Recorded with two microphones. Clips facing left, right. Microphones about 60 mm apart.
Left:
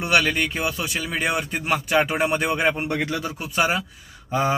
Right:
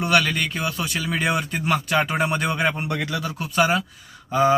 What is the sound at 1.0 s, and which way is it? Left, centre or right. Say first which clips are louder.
Speech: right 2 dB; centre.